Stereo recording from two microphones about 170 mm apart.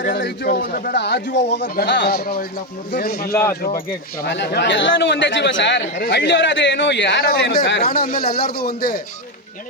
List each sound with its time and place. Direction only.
0.5 s speech: 60° left (ahead or behind); by 1.6 s 90° left
1.6 s speech: 65° left (ahead or behind)
4.2 s speech: 80° left; by 9.0 s 65° left (ahead or behind)